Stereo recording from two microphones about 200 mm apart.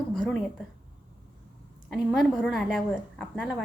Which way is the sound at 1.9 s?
Centre (ahead or behind).